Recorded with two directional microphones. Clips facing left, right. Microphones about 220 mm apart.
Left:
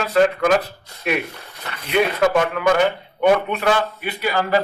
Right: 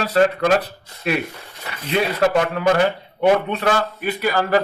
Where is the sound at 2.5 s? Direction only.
35° right (ahead or behind).